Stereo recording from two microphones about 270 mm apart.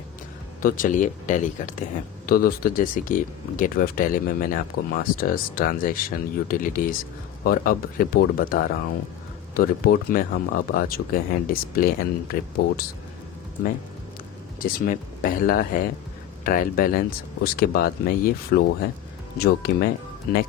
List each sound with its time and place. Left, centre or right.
0.6 s speech: left
14.6 s speech: left